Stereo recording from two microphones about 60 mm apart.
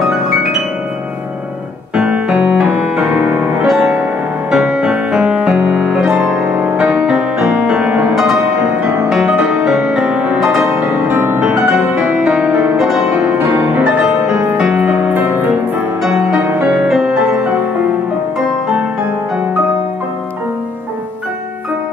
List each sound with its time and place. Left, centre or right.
0.0 s music: centre
2.0 s music: centre
7.8 s music: right
8.1 s music: centre
9.5 s music: centre
10.4 s music: centre
10.8 s music: right
11.1 s music: right
11.4 s music: centre
13.7 s music: centre
16.5 s music: right